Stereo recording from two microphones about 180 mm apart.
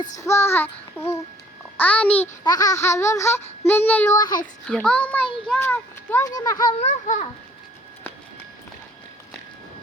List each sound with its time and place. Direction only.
0.2 s a child's voice: 15° left (ahead or behind)
2.4 s a child's voice: 20° left (ahead or behind)
4.6 s a child's voice: 5° left (ahead or behind); by 6.7 s 20° left (ahead or behind)
6.7 s a child's voice: 40° left (ahead or behind)